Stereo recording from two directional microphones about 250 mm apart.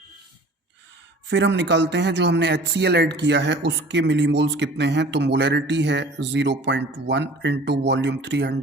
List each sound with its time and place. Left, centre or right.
1.3 s speech: right